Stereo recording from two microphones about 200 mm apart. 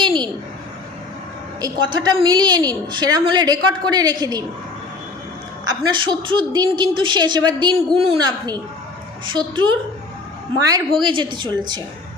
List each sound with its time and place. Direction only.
1.6 s a woman's voice: 20° right (ahead or behind)
5.6 s a woman's voice: 20° right (ahead or behind)